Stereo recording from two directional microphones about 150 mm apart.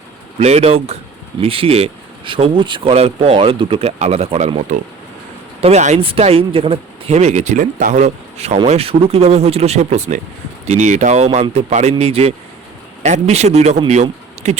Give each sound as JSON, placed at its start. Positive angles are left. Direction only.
{"t": 0.3, "sound": "speech", "side_deg": -45}